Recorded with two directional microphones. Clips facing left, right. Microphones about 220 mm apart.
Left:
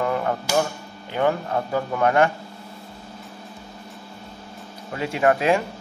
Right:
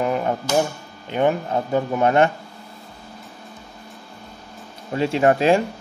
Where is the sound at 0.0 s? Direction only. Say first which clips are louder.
Right 2 dB; 20° right (ahead or behind).